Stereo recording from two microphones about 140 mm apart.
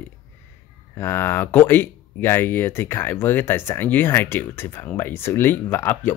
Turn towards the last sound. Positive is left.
turn(degrees=15)  # may be behind; listen again after turning